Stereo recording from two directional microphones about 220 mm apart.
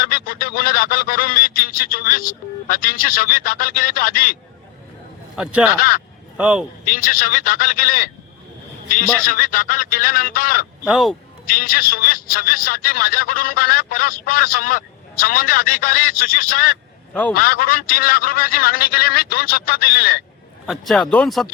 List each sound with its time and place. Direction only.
0.0 s speech: 40° left (ahead or behind)
5.4 s speech: 5° right (ahead or behind)
5.7 s a man's voice: 40° left (ahead or behind)
6.3 s a man's voice: 5° right (ahead or behind)
6.8 s a man's voice: 40° left (ahead or behind)
10.8 s speech: centre (ahead or behind)
11.4 s a man's voice: 40° left (ahead or behind)
20.7 s speech: centre (ahead or behind)